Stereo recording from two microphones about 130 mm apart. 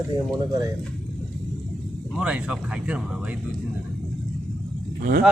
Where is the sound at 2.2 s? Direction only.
5° right (ahead or behind).